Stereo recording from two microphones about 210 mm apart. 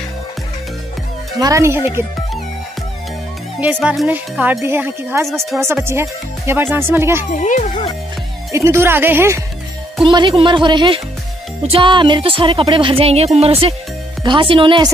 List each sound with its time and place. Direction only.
1.4 s speech: 15° right (ahead or behind)
3.6 s speech: centre (ahead or behind)
7.2 s speech: 35° left (ahead or behind)
8.5 s speech: 15° right (ahead or behind)
10.0 s speech: 25° right (ahead or behind)